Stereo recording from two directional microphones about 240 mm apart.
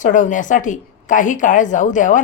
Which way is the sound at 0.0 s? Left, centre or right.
Left.